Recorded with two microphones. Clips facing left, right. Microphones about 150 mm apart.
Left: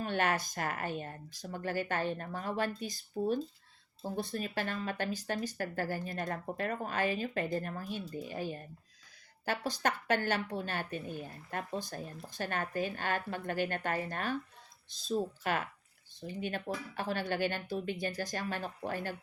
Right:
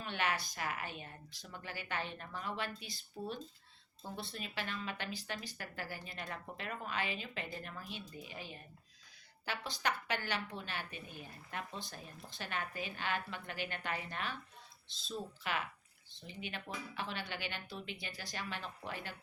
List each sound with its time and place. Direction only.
0.0 s speech: 45° left (ahead or behind)